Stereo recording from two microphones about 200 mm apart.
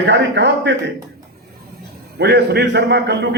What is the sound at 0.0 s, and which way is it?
Speech, 60° right (ahead or behind).